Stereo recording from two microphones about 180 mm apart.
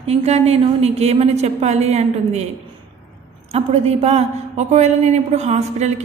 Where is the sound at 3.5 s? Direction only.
35° right (ahead or behind).